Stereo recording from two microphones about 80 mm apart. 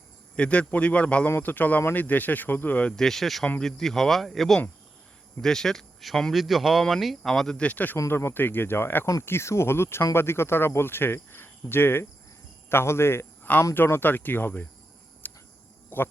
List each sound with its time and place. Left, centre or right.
0.3 s speech: centre
7.5 s speech: centre
15.2 s insect: left
15.9 s speech: left